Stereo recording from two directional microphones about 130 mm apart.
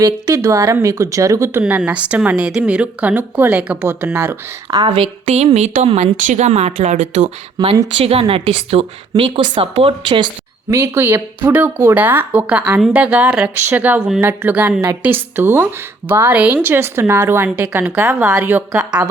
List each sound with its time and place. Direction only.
0.0 s speech: 25° right (ahead or behind)
1.6 s speech: 10° right (ahead or behind)
4.9 s a woman's voice: 55° right (ahead or behind)
5.5 s a woman's voice: 65° right (ahead or behind)
5.9 s a woman's voice: 50° right (ahead or behind)
6.1 s speech: 75° right (ahead or behind)
7.6 s a woman's voice: 30° right (ahead or behind)
7.9 s a woman's voice: 45° right (ahead or behind)
10.7 s speech: 20° right (ahead or behind)